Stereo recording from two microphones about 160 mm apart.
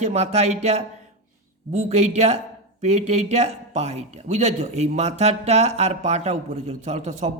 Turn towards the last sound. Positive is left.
turn(degrees=-45)  # may be behind; listen again after turning